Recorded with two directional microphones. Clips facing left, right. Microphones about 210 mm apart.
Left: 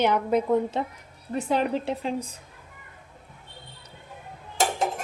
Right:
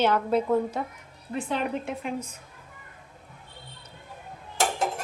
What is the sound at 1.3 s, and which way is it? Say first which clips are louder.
Speech: left 4 dB; 40° left (ahead or behind).